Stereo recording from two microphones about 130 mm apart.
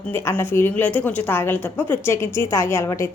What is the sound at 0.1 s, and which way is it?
A woman's voice, 15° left (ahead or behind).